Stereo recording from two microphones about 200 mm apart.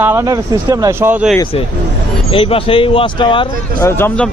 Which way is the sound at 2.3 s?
25° left (ahead or behind).